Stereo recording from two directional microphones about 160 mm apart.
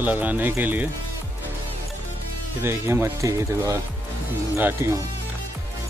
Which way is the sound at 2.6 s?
15° right (ahead or behind).